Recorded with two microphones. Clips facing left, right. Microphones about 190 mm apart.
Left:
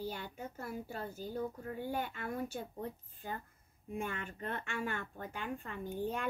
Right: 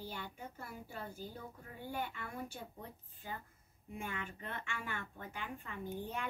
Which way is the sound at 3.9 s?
50° left (ahead or behind).